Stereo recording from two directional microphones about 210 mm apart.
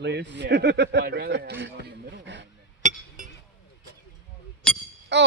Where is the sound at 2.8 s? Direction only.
35° right (ahead or behind).